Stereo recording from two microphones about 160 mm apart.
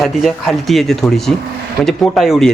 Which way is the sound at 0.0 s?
Centre (ahead or behind).